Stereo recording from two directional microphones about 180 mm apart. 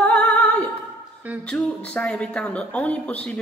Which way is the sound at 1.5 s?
5° left (ahead or behind).